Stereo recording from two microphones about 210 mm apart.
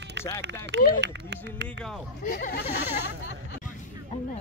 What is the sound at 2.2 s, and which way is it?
Speech, 40° left (ahead or behind).